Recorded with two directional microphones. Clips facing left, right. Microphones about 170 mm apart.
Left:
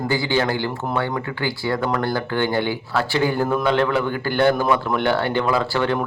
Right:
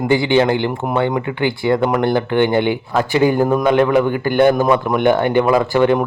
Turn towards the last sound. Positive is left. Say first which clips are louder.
# right 7 dB
turn(degrees=-15)  # may be behind; listen again after turning